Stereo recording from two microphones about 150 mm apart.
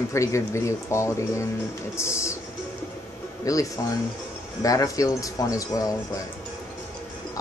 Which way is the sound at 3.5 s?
25° left (ahead or behind).